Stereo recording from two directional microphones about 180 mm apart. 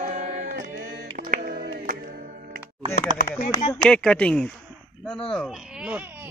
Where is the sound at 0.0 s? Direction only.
45° right (ahead or behind).